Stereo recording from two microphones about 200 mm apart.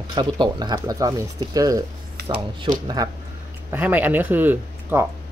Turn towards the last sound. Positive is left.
turn(degrees=-10)  # may be behind; listen again after turning